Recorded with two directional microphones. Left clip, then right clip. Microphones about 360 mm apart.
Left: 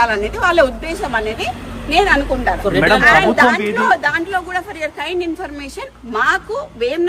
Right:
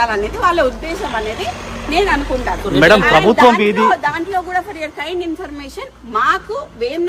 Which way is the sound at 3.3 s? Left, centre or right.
Right.